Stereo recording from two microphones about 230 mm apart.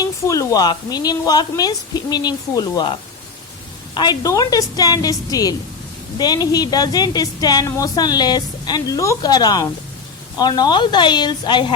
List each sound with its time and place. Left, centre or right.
0.0 s a woman's voice: centre
3.9 s a woman's voice: centre